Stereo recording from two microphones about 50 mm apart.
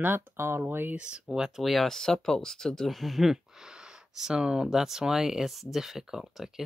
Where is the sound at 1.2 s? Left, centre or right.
Centre.